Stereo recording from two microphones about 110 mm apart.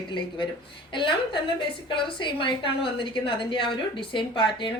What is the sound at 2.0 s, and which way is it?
A woman's voice, 50° left (ahead or behind).